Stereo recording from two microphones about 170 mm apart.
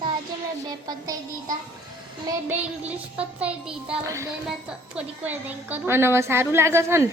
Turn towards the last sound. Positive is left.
turn(degrees=-15)  # may be behind; listen again after turning